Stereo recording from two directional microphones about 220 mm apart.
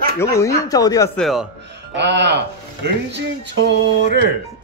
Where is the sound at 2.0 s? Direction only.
50° right (ahead or behind).